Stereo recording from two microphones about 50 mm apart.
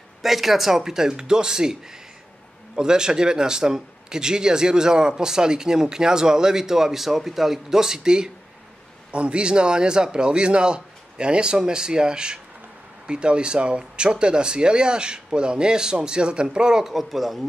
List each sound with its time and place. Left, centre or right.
0.2 s speech: centre